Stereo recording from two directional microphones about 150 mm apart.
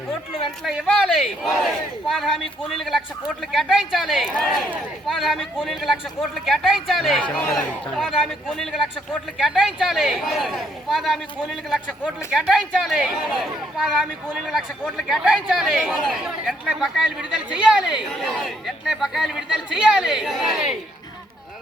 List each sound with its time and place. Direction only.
0.6 s a man's voice: centre (ahead or behind)
3.4 s a man's voice: centre (ahead or behind)